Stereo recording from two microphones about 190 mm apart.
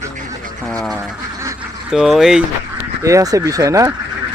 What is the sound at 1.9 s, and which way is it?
Speech, centre (ahead or behind).